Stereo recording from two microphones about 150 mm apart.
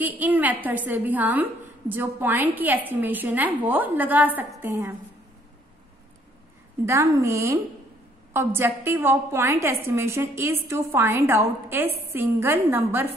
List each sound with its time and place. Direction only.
0.0 s a woman's voice: 10° right (ahead or behind)
6.9 s a woman's voice: 20° right (ahead or behind)